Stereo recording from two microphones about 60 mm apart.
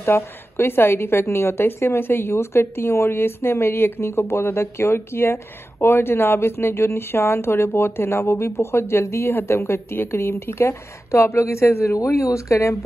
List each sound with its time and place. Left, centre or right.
0.0 s a woman's voice: left